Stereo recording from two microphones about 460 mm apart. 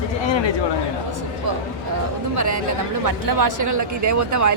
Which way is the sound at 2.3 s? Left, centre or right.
Right.